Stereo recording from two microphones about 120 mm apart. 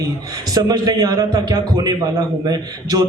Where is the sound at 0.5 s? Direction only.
35° right (ahead or behind).